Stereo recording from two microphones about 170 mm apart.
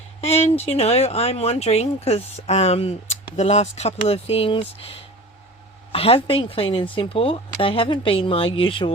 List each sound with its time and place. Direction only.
0.2 s speech: 40° left (ahead or behind)